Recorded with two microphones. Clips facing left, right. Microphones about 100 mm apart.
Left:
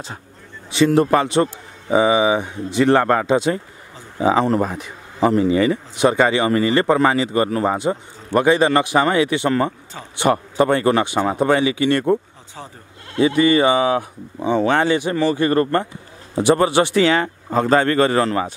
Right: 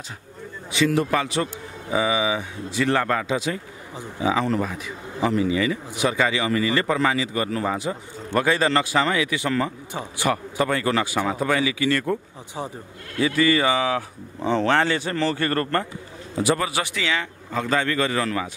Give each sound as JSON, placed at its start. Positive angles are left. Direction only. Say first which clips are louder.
{"t": 0.7, "sound": "a man's voice", "louder": "left 6 dB", "side_deg": 35}
{"t": 16.3, "sound": "a man's voice", "louder": "left 8 dB", "side_deg": 30}